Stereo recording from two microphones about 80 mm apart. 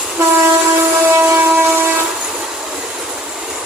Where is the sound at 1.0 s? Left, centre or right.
Right.